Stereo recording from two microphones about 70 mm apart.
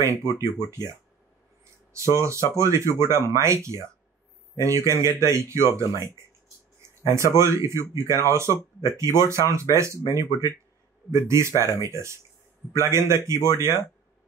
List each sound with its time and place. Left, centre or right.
0.0 s speech: right
2.0 s speech: right
4.6 s speech: right